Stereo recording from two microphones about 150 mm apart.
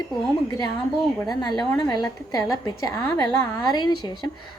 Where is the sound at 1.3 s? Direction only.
30° left (ahead or behind).